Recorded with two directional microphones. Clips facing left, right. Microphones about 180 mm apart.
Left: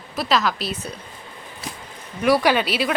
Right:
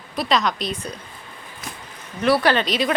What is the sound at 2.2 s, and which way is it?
Speech, 10° left (ahead or behind).